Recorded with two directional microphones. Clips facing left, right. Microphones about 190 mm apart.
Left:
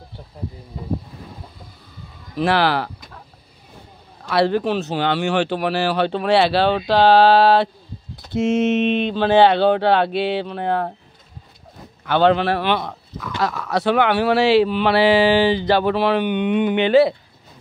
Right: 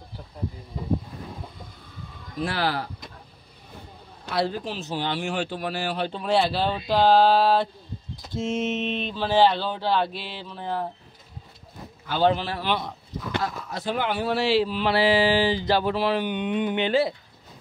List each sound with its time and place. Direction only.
2.3 s speech: 80° left
4.3 s speech: 70° left (ahead or behind)
12.1 s speech: 70° left (ahead or behind)